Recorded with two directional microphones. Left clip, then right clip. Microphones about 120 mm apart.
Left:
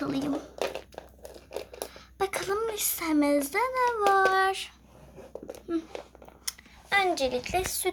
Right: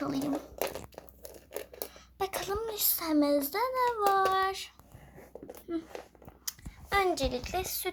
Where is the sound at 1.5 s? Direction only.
10° right (ahead or behind).